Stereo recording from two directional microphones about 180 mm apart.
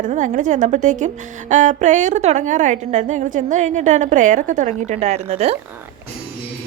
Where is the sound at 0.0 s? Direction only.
45° right (ahead or behind).